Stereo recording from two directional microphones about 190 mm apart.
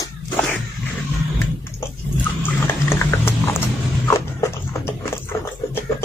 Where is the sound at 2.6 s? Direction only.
10° left (ahead or behind).